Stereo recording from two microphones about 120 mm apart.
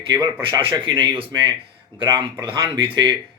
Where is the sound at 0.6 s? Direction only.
45° right (ahead or behind).